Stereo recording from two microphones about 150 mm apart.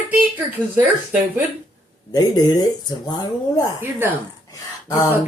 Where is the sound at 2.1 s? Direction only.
25° left (ahead or behind).